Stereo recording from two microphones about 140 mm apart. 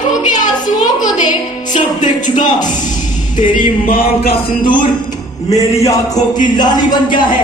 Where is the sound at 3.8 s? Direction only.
90° left.